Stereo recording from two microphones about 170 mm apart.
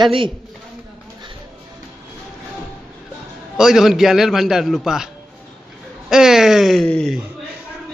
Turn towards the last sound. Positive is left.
turn(degrees=5)  # may be behind; listen again after turning